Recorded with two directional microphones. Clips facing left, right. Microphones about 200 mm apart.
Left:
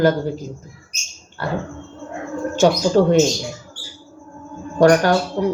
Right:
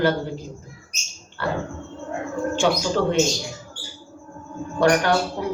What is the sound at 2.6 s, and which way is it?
Speech, 40° left (ahead or behind).